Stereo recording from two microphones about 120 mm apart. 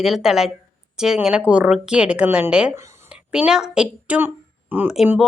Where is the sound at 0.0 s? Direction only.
5° right (ahead or behind).